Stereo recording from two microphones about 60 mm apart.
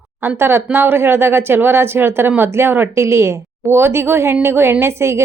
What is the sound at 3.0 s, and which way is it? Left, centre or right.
A woman's voice, right.